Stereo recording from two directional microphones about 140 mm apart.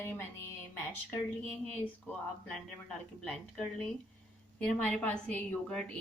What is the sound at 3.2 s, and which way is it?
A woman's voice, 5° left (ahead or behind).